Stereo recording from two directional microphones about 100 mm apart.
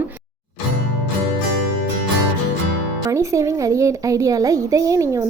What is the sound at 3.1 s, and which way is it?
A woman's voice, 30° right (ahead or behind).